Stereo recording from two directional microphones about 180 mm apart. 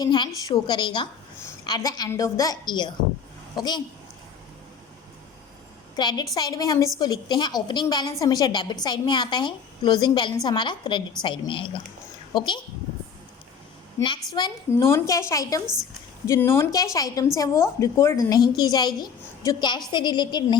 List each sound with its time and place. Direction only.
0.0 s a woman's voice: 25° left (ahead or behind)
6.0 s a woman's voice: 25° left (ahead or behind)
14.3 s a woman's voice: 20° left (ahead or behind)